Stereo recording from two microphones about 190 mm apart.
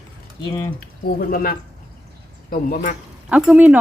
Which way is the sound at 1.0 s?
50° left (ahead or behind).